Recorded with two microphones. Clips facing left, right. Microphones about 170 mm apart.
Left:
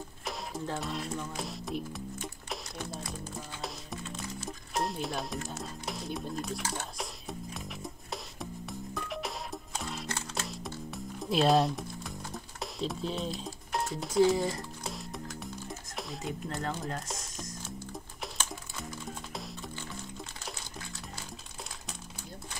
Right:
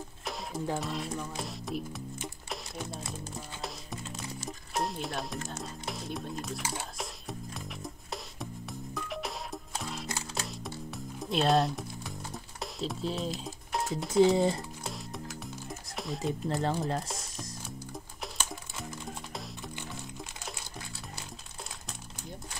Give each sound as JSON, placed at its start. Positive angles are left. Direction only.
{"t": 0.2, "sound": "music", "side_deg": 0}
{"t": 0.7, "sound": "speech", "side_deg": 0}
{"t": 2.2, "sound": "music", "side_deg": 0}
{"t": 13.4, "sound": "speech", "side_deg": 0}
{"t": 14.3, "sound": "speech", "side_deg": -25}
{"t": 14.8, "sound": "music", "side_deg": 0}
{"t": 16.0, "sound": "speech", "side_deg": 0}
{"t": 16.6, "sound": "speech", "side_deg": -30}
{"t": 18.9, "sound": "music", "side_deg": 0}